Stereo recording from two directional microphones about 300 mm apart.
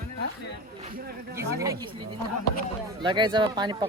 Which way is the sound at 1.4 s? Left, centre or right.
Centre.